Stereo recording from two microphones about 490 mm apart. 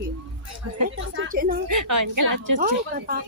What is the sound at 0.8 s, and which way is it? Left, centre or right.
Speech, centre.